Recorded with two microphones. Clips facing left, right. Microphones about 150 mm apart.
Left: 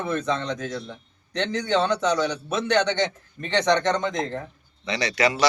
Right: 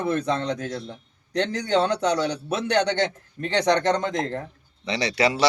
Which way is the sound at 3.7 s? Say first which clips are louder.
Even; 10° right (ahead or behind).